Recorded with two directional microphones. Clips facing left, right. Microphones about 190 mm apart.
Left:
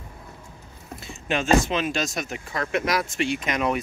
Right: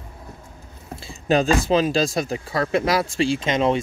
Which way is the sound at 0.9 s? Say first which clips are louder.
Right 7 dB; 35° right (ahead or behind).